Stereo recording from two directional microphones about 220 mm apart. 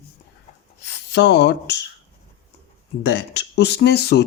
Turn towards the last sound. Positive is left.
turn(degrees=50)  # may be behind; listen again after turning